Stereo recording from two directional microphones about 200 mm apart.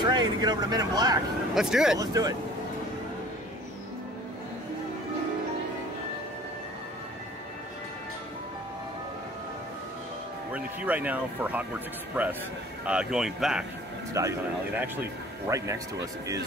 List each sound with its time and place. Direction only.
0.0 s speech: 20° right (ahead or behind)
1.5 s speech: 5° right (ahead or behind)
2.0 s speech: 15° right (ahead or behind)
10.5 s speech: 5° right (ahead or behind)